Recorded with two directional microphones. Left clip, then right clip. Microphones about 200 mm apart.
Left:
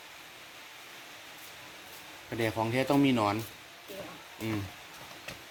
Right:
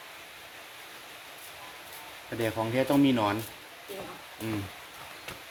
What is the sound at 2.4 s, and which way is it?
Speech, 30° left (ahead or behind).